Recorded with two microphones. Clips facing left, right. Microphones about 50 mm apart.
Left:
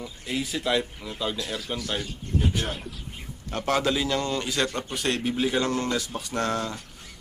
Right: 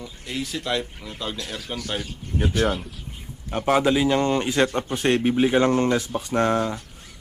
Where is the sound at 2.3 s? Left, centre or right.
Right.